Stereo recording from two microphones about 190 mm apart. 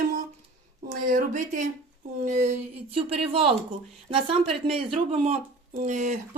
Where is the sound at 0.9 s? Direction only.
45° right (ahead or behind).